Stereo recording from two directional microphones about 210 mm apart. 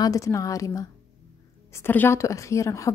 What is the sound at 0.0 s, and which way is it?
A woman's voice, 15° left (ahead or behind).